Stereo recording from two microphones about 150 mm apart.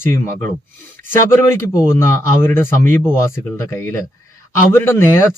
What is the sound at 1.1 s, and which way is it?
Speech, 20° left (ahead or behind).